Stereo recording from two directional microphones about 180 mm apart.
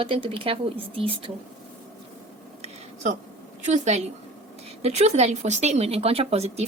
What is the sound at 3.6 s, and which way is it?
Speech, 40° right (ahead or behind).